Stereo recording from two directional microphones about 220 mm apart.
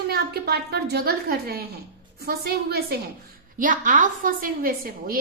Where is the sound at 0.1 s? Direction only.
45° right (ahead or behind).